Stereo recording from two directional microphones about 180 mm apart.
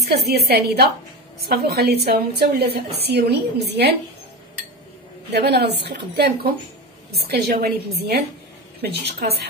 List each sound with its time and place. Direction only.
0.1 s a woman's voice: 60° right (ahead or behind)
5.3 s a woman's voice: 65° right (ahead or behind)